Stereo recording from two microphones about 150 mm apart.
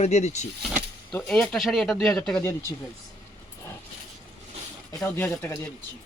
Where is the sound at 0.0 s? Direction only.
50° left (ahead or behind).